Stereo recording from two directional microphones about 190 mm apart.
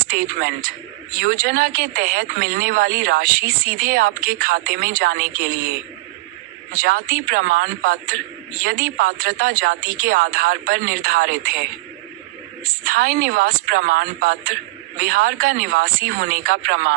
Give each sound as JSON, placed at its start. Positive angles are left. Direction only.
{"t": 0.1, "sound": "speech", "side_deg": -50}
{"t": 6.7, "sound": "speech", "side_deg": -50}
{"t": 12.8, "sound": "speech", "side_deg": -45}